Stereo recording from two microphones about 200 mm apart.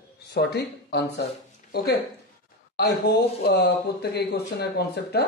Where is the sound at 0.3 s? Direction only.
55° left (ahead or behind).